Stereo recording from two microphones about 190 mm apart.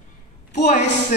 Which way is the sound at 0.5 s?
40° left (ahead or behind).